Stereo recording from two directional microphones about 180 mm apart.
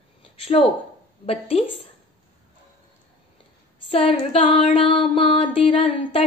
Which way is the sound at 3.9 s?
30° left (ahead or behind).